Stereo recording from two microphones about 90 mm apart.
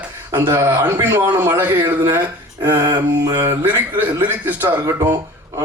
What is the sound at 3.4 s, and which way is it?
Speech, 30° right (ahead or behind).